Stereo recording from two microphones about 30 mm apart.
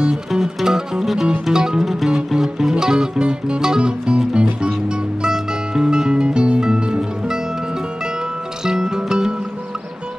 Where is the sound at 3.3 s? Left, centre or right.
Right.